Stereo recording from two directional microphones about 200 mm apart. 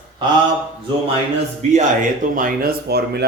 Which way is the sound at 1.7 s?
40° right (ahead or behind).